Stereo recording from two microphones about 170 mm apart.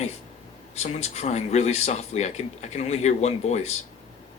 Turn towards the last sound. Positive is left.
turn(degrees=40)  # may be behind; listen again after turning